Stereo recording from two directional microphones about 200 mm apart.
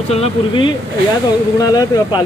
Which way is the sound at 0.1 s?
25° left (ahead or behind).